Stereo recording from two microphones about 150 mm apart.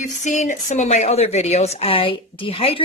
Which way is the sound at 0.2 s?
55° left (ahead or behind).